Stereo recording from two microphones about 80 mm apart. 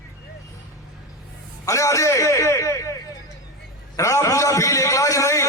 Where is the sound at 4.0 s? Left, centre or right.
Left.